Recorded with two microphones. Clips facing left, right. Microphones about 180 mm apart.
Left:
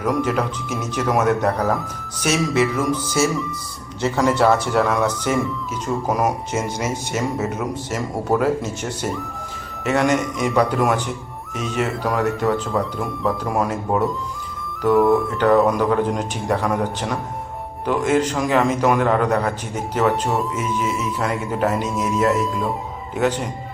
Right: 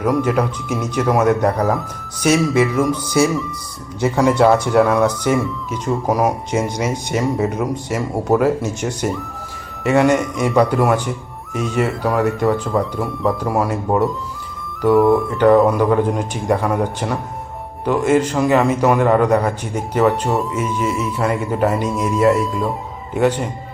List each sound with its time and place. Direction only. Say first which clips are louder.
0.0 s speech: right 3 dB; 5° right (ahead or behind)
2.9 s speech: right 3 dB; 5° left (ahead or behind)
4.0 s speech: right 3 dB; 10° right (ahead or behind)
7.6 s speech: right 4 dB; 10° right (ahead or behind)
19.7 s speech: right 4 dB; 5° left (ahead or behind)
21.0 s speech: right 4 dB; 5° right (ahead or behind)